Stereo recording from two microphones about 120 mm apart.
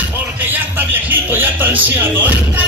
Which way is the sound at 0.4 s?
15° right (ahead or behind).